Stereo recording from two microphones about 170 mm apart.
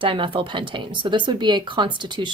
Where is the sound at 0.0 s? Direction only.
30° right (ahead or behind).